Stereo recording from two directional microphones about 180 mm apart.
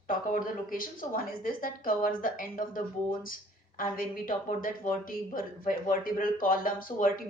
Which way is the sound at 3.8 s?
50° left (ahead or behind).